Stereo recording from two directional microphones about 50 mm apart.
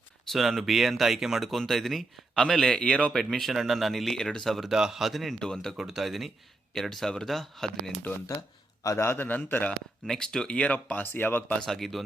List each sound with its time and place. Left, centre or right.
0.3 s speech: centre
3.1 s speech: centre
4.7 s speech: centre
5.4 s speech: centre
5.7 s speech: centre
8.8 s a man's voice: left
9.0 s a man's voice: left
10.1 s speech: centre
11.0 s a man's voice: left
11.6 s speech: centre